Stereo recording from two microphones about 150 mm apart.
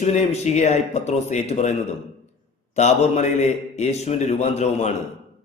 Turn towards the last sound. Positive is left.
turn(degrees=50)  # may be behind; listen again after turning